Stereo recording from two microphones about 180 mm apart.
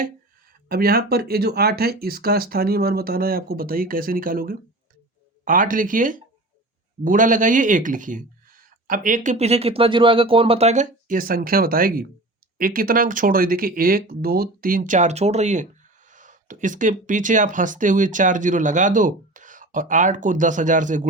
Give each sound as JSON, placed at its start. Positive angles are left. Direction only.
{"t": 0.7, "sound": "speech", "side_deg": -60}